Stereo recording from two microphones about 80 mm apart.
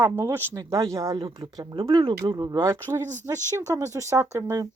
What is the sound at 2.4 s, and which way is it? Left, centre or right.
Speech, right.